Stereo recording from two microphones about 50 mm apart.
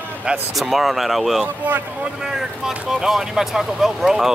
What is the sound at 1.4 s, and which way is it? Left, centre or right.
Speech, right.